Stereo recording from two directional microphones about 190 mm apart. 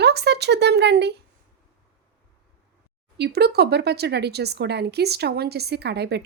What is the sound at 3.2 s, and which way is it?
Speech, 60° right (ahead or behind).